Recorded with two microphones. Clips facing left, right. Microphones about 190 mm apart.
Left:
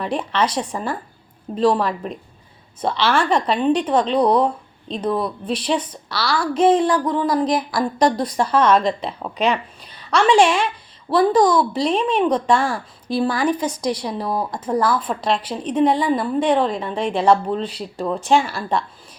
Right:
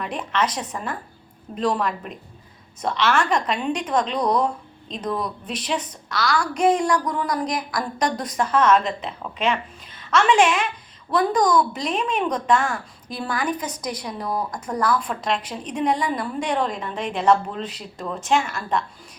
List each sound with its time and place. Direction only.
0.0 s a woman's voice: 30° left (ahead or behind)